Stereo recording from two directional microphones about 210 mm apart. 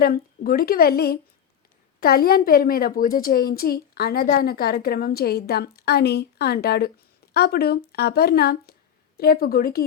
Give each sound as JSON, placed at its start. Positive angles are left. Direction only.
{"t": 0.0, "sound": "a woman's voice", "side_deg": 45}